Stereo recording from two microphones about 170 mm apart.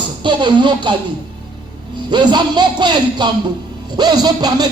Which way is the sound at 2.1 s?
25° right (ahead or behind).